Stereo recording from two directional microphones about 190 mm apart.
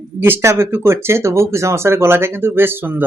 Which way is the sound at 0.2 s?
15° right (ahead or behind).